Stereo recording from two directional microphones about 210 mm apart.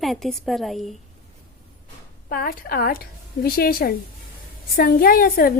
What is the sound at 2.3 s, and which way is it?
A woman's voice, 45° left (ahead or behind).